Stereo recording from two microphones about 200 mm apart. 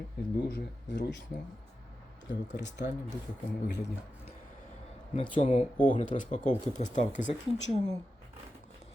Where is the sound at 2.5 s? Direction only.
60° left (ahead or behind).